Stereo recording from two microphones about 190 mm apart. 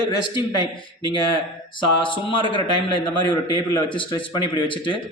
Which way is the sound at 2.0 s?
25° left (ahead or behind).